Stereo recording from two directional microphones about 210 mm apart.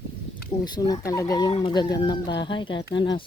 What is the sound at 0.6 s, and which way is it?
Speech, 20° left (ahead or behind).